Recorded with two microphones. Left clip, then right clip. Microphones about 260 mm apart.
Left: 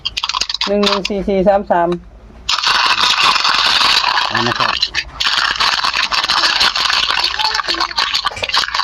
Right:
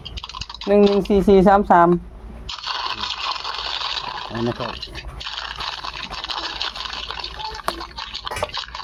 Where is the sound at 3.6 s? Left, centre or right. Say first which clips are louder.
Left 14 dB; left.